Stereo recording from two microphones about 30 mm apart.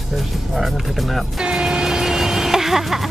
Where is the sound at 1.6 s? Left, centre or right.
Centre.